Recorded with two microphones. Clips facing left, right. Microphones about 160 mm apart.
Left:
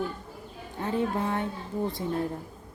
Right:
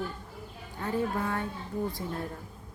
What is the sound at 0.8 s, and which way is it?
A woman's voice, 25° left (ahead or behind).